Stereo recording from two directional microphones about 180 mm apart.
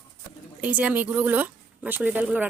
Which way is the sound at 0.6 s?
10° right (ahead or behind).